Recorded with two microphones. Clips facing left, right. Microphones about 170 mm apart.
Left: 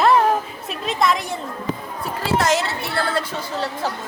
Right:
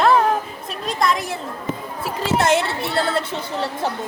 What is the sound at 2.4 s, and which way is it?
Speech, 55° right (ahead or behind).